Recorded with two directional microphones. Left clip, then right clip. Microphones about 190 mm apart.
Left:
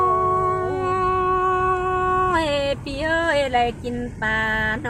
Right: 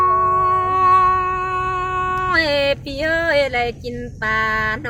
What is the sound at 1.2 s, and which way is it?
Humming, 85° right.